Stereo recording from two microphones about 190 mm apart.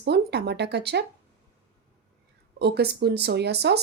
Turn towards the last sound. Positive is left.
turn(degrees=-60)  # may be behind; listen again after turning